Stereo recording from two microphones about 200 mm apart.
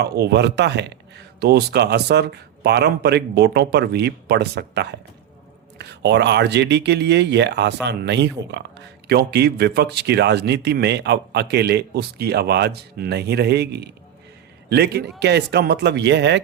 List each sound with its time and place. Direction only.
0.0 s speech: 55° right (ahead or behind)